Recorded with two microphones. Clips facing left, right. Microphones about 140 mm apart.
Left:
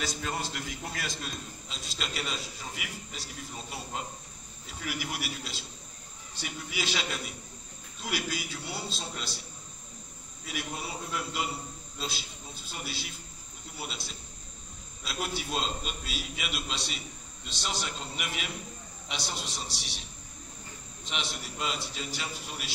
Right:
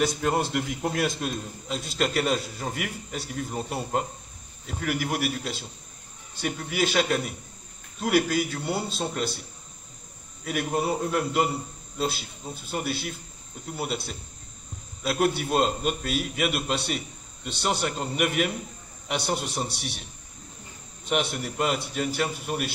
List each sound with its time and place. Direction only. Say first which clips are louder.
0.0 s a man's voice: right 10 dB; 55° right (ahead or behind)
10.4 s a man's voice: right 11 dB; 55° right (ahead or behind)